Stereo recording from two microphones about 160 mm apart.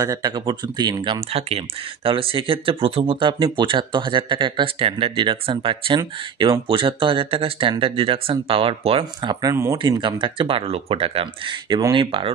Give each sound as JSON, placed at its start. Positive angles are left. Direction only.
{"t": 0.0, "sound": "speech", "side_deg": -20}